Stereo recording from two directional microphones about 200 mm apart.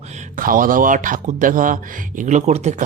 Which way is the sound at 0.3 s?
45° right (ahead or behind).